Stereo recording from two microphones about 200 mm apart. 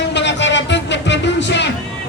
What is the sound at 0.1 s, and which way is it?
Music, 60° left (ahead or behind).